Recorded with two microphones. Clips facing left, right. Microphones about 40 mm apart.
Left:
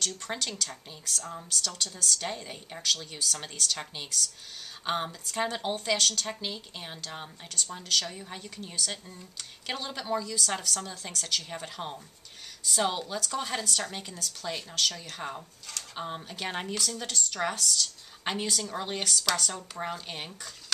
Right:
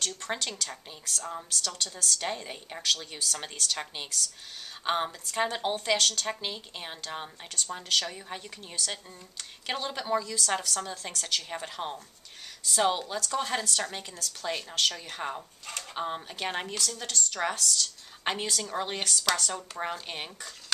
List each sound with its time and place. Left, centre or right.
0.0 s a woman's voice: centre
14.4 s a woman's voice: centre
15.6 s a sound: right
16.0 s a woman's voice: centre